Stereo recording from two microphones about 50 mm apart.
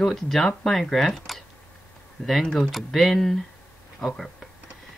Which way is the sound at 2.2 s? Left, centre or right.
Centre.